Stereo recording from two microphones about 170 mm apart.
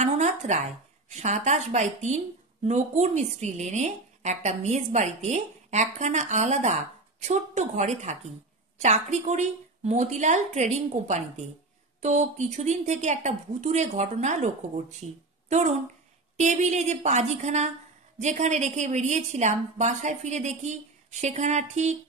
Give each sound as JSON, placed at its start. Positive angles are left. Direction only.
{"t": 0.0, "sound": "a sound", "side_deg": -45}
{"t": 1.1, "sound": "a woman's voice", "side_deg": -40}
{"t": 16.3, "sound": "a woman's voice", "side_deg": -45}